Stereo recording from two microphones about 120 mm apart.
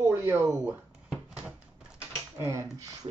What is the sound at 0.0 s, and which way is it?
Speech, 20° right (ahead or behind).